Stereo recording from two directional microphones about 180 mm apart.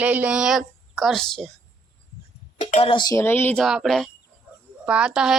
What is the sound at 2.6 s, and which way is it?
Speech, 40° left (ahead or behind).